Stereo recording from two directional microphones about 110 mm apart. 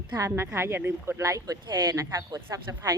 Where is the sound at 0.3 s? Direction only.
25° right (ahead or behind).